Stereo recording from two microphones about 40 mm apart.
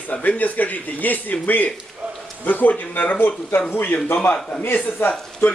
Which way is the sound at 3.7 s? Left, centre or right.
Left.